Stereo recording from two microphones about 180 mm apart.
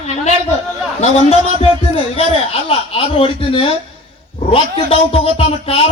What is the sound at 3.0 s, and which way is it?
A man's voice, 30° left (ahead or behind).